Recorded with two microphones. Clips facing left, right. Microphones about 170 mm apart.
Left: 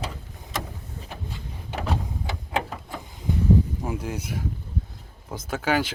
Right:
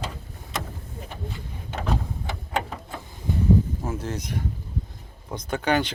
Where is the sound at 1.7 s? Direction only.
10° left (ahead or behind).